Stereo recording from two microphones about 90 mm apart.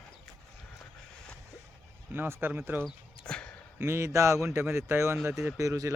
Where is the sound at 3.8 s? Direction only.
30° right (ahead or behind).